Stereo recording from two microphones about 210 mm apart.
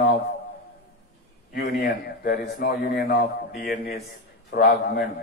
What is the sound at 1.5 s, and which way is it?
A man's voice, 45° left (ahead or behind).